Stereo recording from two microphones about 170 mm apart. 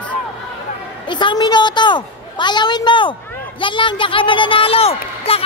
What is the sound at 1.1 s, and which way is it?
A woman's voice, 25° left (ahead or behind).